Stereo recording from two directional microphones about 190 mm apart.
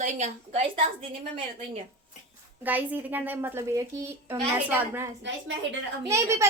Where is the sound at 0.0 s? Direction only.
35° right (ahead or behind).